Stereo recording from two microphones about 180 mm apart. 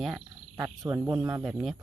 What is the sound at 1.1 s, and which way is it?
Speech, 15° right (ahead or behind).